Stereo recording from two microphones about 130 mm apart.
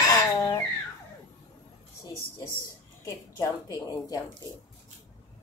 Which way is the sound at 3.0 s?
25° left (ahead or behind).